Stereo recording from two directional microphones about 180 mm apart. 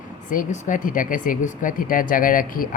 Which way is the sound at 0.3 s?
50° left (ahead or behind).